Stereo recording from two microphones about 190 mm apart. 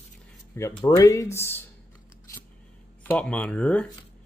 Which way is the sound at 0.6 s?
15° left (ahead or behind).